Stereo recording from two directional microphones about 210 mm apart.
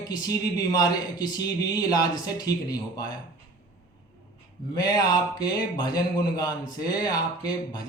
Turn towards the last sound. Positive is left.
turn(degrees=20)  # may be behind; listen again after turning